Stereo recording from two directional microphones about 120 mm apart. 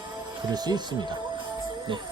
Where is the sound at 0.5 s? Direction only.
35° right (ahead or behind).